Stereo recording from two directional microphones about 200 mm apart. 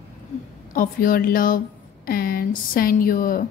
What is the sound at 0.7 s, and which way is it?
A woman's voice, 45° left (ahead or behind).